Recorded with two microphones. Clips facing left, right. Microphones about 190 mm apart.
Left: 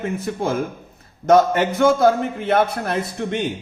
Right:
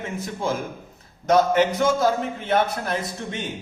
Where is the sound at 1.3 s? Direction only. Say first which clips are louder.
Left 3 dB; 50° left (ahead or behind).